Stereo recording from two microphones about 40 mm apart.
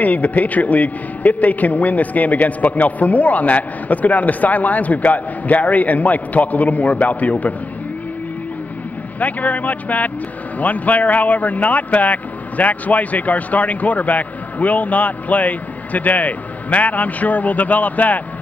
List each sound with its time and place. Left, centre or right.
0.0 s speech: left
9.2 s speech: left